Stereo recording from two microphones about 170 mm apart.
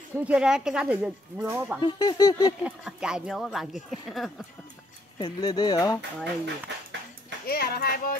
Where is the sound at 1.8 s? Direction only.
25° left (ahead or behind).